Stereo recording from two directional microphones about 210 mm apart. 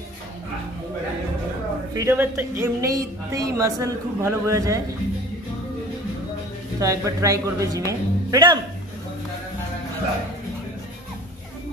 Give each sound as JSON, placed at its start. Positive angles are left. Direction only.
{"t": 2.0, "sound": "speech", "side_deg": -15}
{"t": 6.8, "sound": "speech", "side_deg": -15}